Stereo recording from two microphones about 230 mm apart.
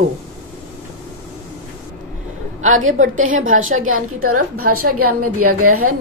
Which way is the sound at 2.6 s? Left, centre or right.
Right.